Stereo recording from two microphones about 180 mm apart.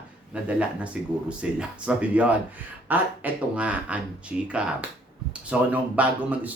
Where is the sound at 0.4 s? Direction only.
5° right (ahead or behind).